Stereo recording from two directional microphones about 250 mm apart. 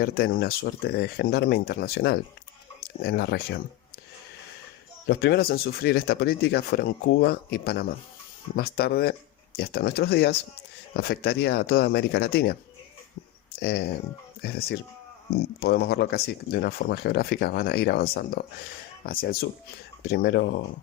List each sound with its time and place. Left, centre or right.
0.0 s speech: left
5.0 s speech: left
13.6 s speech: left